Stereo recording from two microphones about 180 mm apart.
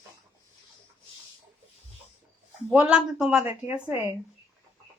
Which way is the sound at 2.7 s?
5° right (ahead or behind).